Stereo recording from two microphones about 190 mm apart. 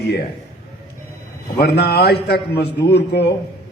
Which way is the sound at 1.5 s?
55° left (ahead or behind).